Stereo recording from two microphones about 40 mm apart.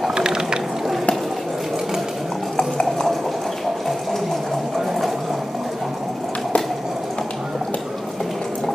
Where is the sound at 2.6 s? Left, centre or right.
Left.